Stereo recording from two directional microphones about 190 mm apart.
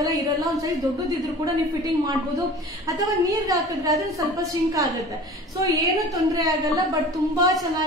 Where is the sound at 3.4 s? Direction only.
20° right (ahead or behind).